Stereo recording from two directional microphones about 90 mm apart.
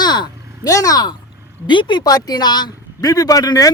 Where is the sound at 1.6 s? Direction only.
60° left (ahead or behind).